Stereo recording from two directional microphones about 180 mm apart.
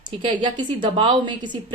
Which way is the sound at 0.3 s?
25° right (ahead or behind).